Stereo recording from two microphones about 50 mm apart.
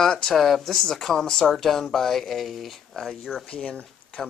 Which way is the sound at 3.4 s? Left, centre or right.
Left.